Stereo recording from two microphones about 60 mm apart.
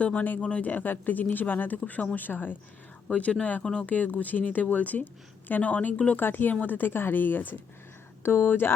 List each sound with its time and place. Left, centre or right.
0.0 s speech: left
6.1 s speech: left